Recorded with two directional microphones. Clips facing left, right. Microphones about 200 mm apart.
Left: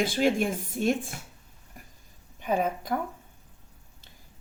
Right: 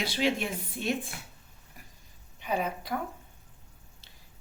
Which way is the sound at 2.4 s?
45° left (ahead or behind).